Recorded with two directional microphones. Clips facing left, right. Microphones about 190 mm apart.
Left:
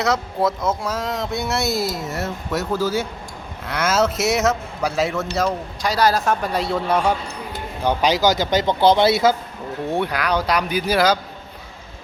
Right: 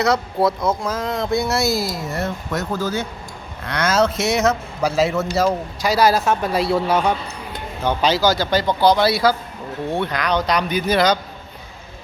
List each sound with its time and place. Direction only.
0.0 s a man's voice: centre (ahead or behind)
7.9 s speech: 15° left (ahead or behind)
9.9 s speech: 10° left (ahead or behind)